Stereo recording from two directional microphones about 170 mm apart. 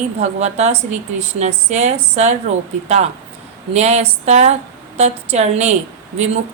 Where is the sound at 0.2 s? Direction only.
40° right (ahead or behind).